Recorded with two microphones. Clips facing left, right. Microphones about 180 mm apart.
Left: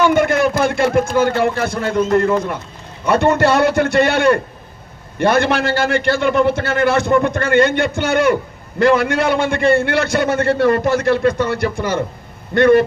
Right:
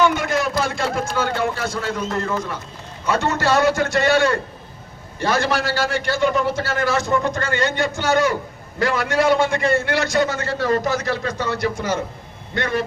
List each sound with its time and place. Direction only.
0.0 s a man's voice: 60° left (ahead or behind)